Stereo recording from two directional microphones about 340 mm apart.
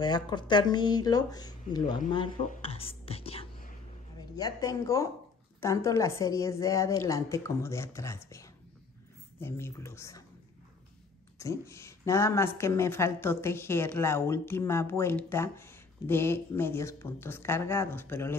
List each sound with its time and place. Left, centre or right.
0.0 s speech: centre
11.3 s speech: centre